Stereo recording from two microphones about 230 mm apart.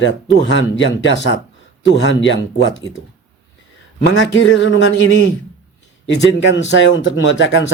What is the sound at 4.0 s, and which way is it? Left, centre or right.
Speech, left.